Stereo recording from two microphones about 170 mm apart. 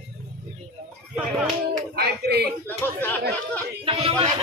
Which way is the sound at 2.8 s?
10° left (ahead or behind).